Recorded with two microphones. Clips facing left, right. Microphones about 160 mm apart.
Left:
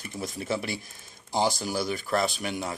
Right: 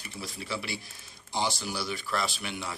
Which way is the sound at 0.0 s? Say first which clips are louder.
Left 6 dB; 45° left (ahead or behind).